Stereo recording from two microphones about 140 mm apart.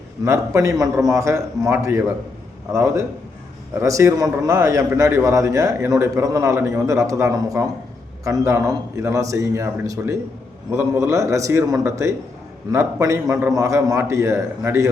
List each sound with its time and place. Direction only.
0.3 s a man's voice: 20° right (ahead or behind)